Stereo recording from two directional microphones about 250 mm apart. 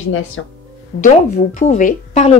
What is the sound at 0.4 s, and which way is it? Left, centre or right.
Speech, left.